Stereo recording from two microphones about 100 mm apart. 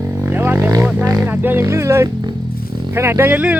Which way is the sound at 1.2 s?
20° right (ahead or behind).